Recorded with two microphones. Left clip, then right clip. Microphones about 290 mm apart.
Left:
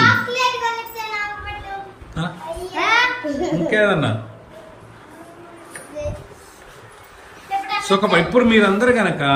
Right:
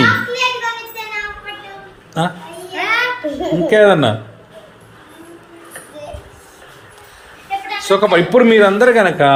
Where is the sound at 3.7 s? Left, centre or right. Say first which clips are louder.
Right 8 dB; centre.